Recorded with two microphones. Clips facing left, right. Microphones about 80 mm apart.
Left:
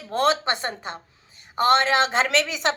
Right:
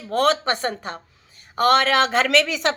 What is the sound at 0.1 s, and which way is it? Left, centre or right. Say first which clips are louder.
A woman's voice: right 2 dB; left.